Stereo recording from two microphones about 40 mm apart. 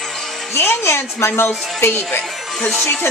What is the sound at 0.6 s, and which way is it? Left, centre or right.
A woman's voice, left.